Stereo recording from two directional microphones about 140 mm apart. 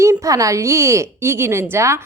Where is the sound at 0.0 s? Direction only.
20° right (ahead or behind).